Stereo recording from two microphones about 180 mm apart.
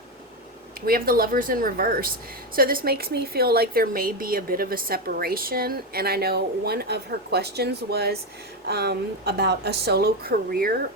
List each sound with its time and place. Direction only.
0.9 s speech: 55° right (ahead or behind)